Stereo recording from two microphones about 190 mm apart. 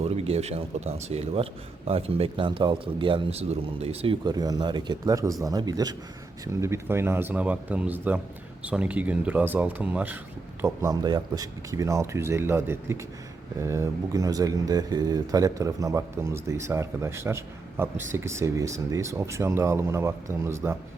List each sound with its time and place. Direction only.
0.0 s speech: 35° right (ahead or behind); by 10.2 s 10° right (ahead or behind)
10.6 s speech: 20° right (ahead or behind)